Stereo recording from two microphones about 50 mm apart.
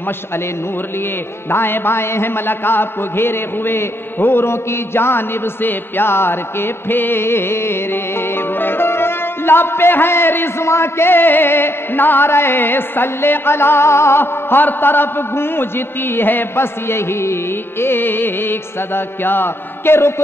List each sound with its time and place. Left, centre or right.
1.5 s music: left